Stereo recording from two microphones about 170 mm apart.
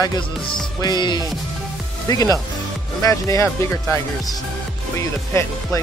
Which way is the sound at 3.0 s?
20° left (ahead or behind).